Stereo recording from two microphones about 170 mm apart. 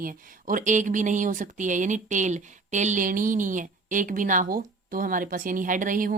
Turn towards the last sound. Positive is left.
turn(degrees=-50)  # may be behind; listen again after turning